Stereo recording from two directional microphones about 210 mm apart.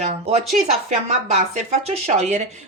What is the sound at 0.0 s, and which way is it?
Speech, 30° right (ahead or behind).